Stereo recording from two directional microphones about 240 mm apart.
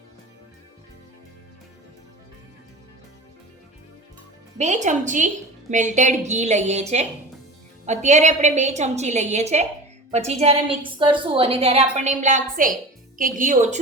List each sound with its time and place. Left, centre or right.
4.5 s a woman's voice: right